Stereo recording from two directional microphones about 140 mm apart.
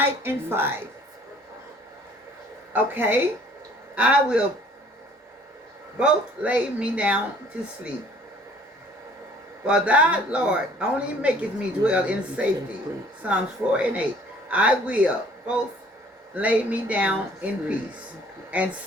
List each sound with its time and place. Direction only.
0.0 s speech: 15° right (ahead or behind)
2.7 s speech: 15° right (ahead or behind)
6.0 s speech: 10° right (ahead or behind)
9.6 s speech: 10° right (ahead or behind)